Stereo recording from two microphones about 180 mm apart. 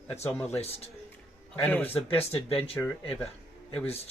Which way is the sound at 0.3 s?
10° left (ahead or behind).